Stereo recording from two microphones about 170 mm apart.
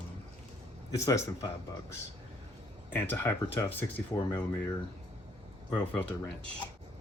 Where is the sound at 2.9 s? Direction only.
10° left (ahead or behind).